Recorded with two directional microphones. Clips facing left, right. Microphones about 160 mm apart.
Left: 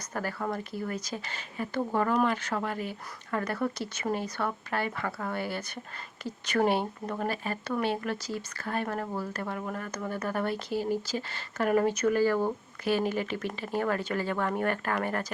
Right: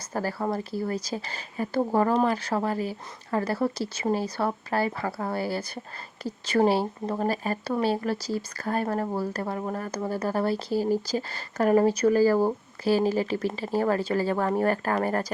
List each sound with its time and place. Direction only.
0.1 s speech: 35° right (ahead or behind)